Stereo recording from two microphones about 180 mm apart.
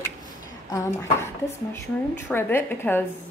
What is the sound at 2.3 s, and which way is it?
Speech, 15° left (ahead or behind).